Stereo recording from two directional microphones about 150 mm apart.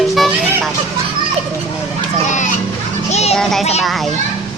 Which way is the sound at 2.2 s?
55° left (ahead or behind).